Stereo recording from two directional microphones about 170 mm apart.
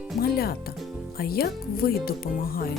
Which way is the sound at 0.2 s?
65° left (ahead or behind).